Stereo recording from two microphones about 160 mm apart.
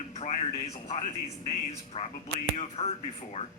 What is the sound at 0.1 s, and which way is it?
A man's voice, 45° left (ahead or behind).